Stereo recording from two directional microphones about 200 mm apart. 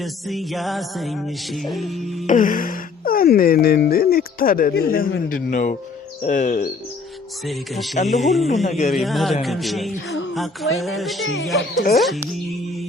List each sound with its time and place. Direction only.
0.0 s music: centre (ahead or behind)
2.2 s speech: 40° left (ahead or behind)
7.4 s music: centre (ahead or behind)
8.6 s speech: 35° left (ahead or behind)
8.9 s music: centre (ahead or behind)
10.1 s music: 70° left (ahead or behind)
10.3 s music: centre (ahead or behind)